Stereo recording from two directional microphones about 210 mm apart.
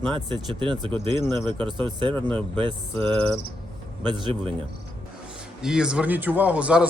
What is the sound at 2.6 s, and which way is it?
Speech, 25° right (ahead or behind).